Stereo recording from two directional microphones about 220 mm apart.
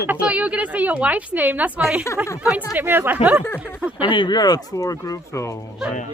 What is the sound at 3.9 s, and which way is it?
Speech, 20° left (ahead or behind).